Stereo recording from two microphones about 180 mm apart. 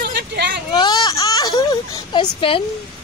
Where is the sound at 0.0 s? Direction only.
65° right (ahead or behind).